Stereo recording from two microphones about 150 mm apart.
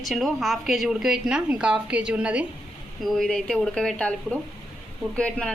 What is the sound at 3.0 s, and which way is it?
A woman's voice, 5° left (ahead or behind).